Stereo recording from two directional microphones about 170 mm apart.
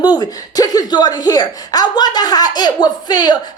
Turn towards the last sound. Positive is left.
turn(degrees=25)  # may be behind; listen again after turning